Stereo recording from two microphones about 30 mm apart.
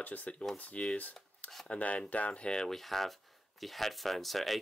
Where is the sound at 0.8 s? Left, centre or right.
Left.